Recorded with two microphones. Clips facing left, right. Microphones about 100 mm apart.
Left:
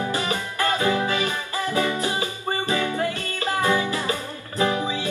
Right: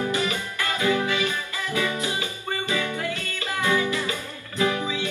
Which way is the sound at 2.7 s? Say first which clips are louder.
Left 4 dB; 35° left (ahead or behind).